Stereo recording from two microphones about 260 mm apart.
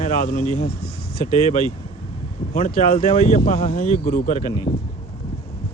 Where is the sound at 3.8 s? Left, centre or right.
Left.